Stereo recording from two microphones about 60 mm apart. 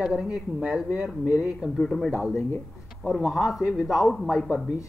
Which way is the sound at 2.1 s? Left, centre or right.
Centre.